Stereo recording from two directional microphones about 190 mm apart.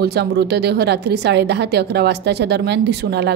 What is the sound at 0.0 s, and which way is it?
A woman's voice, 60° right (ahead or behind).